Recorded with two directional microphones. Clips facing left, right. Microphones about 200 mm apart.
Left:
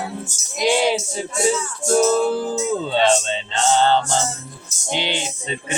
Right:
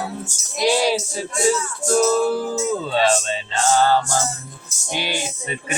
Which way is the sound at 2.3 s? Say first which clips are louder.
Left 1 dB; 20° left (ahead or behind).